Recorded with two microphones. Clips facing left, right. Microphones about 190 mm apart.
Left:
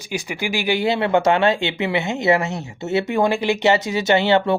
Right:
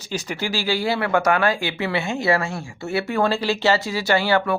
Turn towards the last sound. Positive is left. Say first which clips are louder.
# left 3 dB
turn(degrees=20)  # may be behind; listen again after turning